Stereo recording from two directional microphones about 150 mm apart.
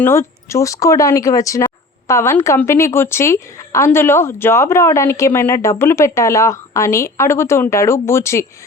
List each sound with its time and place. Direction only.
0.0 s a woman's voice: 15° left (ahead or behind)